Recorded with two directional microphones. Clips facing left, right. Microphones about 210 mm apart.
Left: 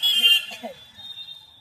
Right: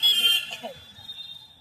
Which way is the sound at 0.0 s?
45° right (ahead or behind).